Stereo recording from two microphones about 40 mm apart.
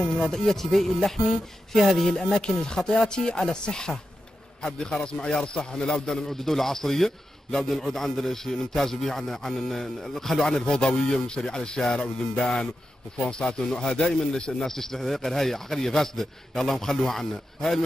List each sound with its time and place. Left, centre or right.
0.2 s a man's voice: centre
2.1 s a man's voice: centre
6.0 s a man's voice: centre
10.6 s a man's voice: left